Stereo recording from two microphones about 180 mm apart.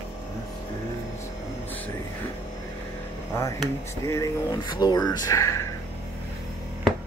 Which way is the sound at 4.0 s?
15° left (ahead or behind).